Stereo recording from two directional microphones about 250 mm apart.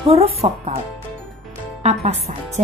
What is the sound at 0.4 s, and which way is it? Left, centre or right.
Speech, right.